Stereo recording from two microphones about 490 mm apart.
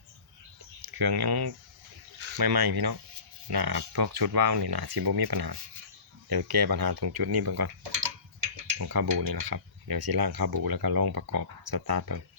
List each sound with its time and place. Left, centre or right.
0.9 s speech: right